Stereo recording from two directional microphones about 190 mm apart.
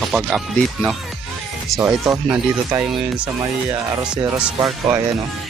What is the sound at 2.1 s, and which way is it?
Speech, 5° right (ahead or behind).